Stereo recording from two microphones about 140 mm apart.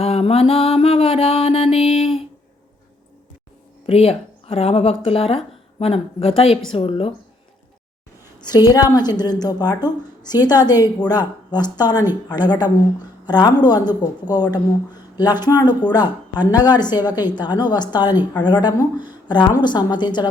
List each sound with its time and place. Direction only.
0.0 s mantra: 45° left (ahead or behind)
3.8 s a woman's voice: 45° left (ahead or behind)
8.4 s a woman's voice: 30° left (ahead or behind)